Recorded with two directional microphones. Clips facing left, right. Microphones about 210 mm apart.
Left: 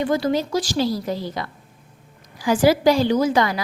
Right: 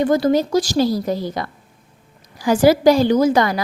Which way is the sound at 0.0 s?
45° right (ahead or behind).